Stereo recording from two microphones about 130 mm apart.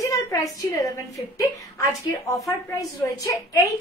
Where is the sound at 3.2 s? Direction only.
25° left (ahead or behind).